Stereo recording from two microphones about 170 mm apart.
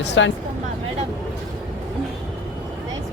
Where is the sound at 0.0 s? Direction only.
90° left.